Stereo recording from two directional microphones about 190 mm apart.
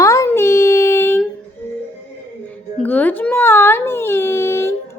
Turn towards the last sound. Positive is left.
turn(degrees=15)  # may be behind; listen again after turning